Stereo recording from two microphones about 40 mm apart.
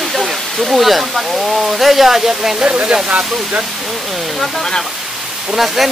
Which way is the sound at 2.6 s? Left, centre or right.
Right.